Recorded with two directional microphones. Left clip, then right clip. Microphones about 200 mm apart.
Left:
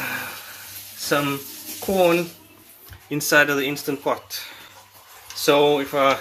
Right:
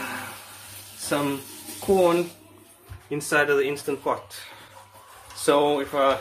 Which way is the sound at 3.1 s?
20° left (ahead or behind).